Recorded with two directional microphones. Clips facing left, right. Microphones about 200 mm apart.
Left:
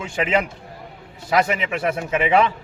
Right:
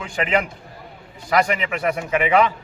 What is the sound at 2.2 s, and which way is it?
Speech, 25° left (ahead or behind).